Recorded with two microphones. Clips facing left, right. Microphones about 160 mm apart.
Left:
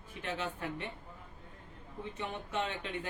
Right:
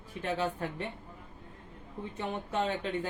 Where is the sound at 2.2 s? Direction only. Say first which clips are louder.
Right 5 dB; 35° right (ahead or behind).